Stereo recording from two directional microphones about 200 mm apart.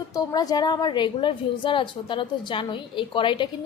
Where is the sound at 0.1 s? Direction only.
20° left (ahead or behind).